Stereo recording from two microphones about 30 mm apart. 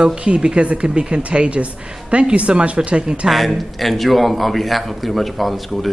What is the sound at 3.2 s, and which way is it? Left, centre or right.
Speech, centre.